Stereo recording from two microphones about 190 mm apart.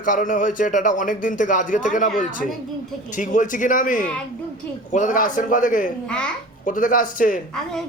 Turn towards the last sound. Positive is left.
turn(degrees=5)  # may be behind; listen again after turning